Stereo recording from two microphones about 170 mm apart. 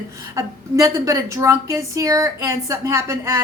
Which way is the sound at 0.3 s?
20° right (ahead or behind).